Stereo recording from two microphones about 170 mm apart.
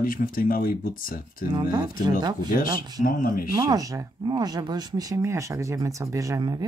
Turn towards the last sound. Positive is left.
turn(degrees=-20)  # may be behind; listen again after turning